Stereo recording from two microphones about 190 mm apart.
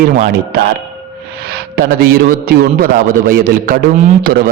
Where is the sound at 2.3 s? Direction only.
55° right (ahead or behind).